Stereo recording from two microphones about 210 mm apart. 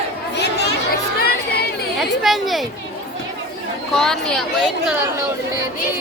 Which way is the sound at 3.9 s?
Centre (ahead or behind).